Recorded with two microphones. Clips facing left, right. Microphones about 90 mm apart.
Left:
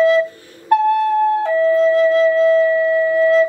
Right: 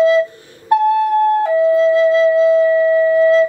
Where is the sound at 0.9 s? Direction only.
15° right (ahead or behind).